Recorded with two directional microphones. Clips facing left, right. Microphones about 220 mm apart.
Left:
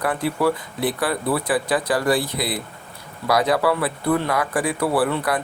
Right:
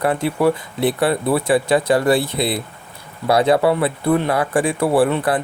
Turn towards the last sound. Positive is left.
turn(degrees=-25)  # may be behind; listen again after turning